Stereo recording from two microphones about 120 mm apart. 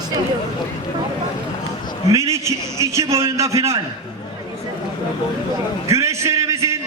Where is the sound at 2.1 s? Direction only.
25° right (ahead or behind).